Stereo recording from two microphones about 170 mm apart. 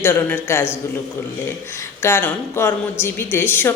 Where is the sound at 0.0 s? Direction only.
10° left (ahead or behind).